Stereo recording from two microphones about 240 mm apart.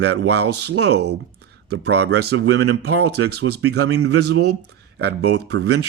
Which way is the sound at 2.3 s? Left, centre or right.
Right.